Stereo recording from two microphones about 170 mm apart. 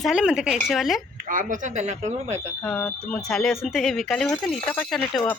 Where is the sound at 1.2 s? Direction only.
50° right (ahead or behind).